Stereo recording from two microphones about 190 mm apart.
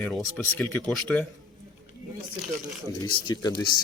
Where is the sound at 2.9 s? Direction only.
20° left (ahead or behind).